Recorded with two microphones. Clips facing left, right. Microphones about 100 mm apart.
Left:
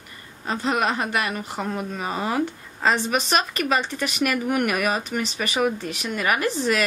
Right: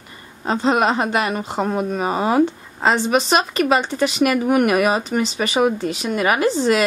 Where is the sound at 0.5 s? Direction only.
30° right (ahead or behind).